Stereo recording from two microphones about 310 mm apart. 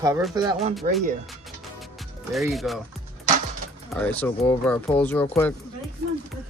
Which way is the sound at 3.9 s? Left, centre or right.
Centre.